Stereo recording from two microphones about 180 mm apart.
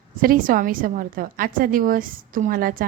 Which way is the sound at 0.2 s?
50° right (ahead or behind).